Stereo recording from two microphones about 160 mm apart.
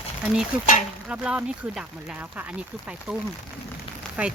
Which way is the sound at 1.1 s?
5° right (ahead or behind).